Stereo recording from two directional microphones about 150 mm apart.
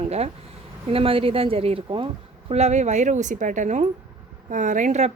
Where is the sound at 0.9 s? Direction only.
40° right (ahead or behind).